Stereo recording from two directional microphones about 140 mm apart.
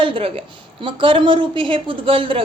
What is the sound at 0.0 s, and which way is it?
A woman's voice, 40° right (ahead or behind).